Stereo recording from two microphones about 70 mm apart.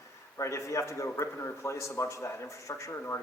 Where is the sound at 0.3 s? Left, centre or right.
Left.